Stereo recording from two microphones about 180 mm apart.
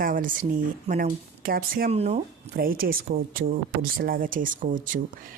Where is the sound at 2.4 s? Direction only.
55° right (ahead or behind).